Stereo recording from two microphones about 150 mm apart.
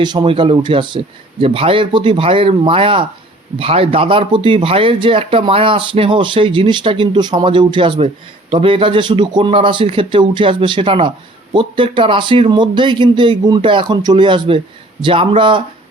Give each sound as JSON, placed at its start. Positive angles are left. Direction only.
{"t": 0.0, "sound": "speech", "side_deg": -30}